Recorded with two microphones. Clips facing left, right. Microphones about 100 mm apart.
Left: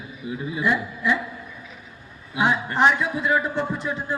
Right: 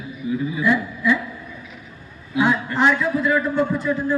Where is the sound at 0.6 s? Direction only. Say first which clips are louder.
Right 1 dB; 20° left (ahead or behind).